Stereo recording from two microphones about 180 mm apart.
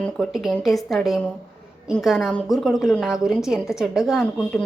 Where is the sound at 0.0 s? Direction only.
Centre (ahead or behind).